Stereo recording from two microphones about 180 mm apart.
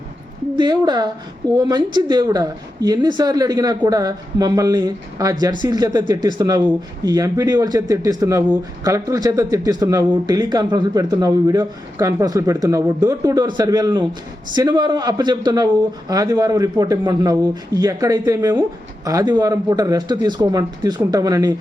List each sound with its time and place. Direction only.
0.5 s speech: 25° right (ahead or behind)